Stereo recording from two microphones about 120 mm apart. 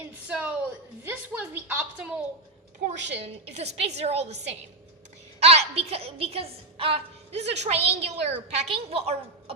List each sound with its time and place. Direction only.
0.3 s a woman's voice: 10° right (ahead or behind)
3.2 s a woman's voice: 60° right (ahead or behind)
5.4 s a woman's voice: 60° right (ahead or behind)